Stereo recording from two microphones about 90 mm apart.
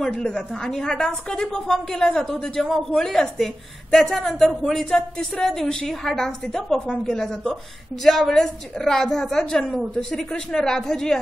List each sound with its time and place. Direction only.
0.0 s speech: 10° left (ahead or behind)